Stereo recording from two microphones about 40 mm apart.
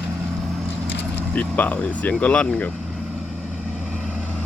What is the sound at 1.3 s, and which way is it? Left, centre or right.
Speech, left.